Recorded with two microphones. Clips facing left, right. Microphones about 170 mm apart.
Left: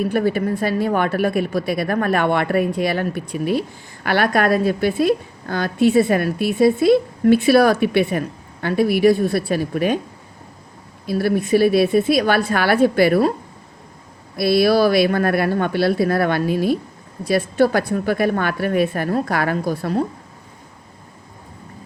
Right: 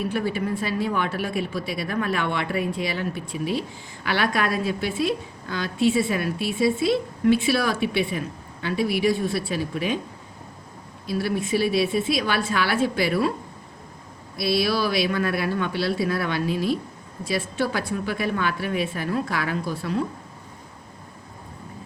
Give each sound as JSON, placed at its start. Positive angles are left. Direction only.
{"t": 0.0, "sound": "a woman's voice", "side_deg": 50}
{"t": 11.0, "sound": "a woman's voice", "side_deg": 50}
{"t": 14.3, "sound": "a woman's voice", "side_deg": 55}